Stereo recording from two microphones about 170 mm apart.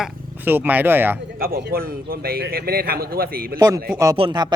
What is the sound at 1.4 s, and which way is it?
A man's voice, 65° right (ahead or behind).